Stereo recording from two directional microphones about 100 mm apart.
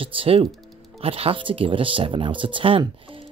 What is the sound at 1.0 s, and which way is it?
Speech, 75° right (ahead or behind).